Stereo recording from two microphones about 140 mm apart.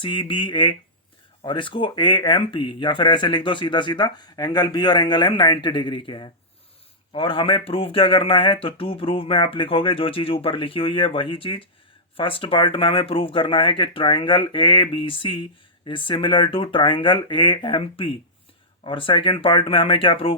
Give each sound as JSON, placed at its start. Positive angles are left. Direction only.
{"t": 0.0, "sound": "speech", "side_deg": 35}